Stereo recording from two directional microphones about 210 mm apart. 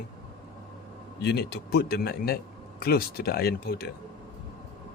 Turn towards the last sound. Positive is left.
turn(degrees=50)  # may be behind; listen again after turning